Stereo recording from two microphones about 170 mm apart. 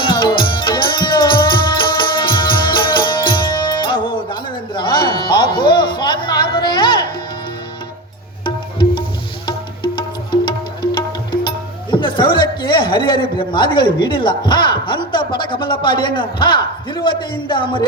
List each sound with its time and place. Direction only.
0.0 s music: 30° left (ahead or behind)
8.4 s music: 30° left (ahead or behind)
10.9 s speech: 25° left (ahead or behind)